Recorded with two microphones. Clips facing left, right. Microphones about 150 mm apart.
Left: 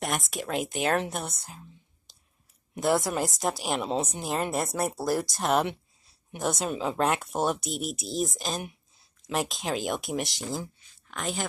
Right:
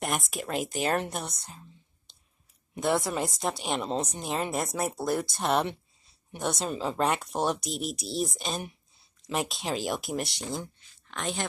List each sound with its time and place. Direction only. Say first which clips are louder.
0.0 s a woman's voice: even; centre (ahead or behind)